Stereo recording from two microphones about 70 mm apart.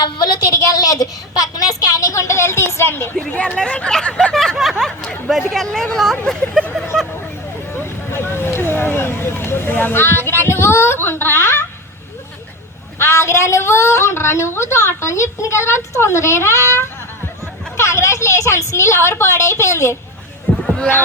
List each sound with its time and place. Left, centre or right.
0.5 s speech: left
3.5 s a sound: centre
5.3 s speech: centre
6.9 s honk: centre
7.7 s vehicle: left
13.0 s a woman's voice: left
20.5 s a sound: left